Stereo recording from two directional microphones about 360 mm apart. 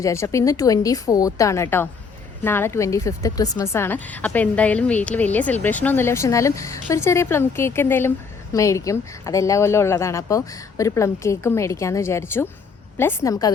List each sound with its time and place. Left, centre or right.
0.0 s a woman's voice: centre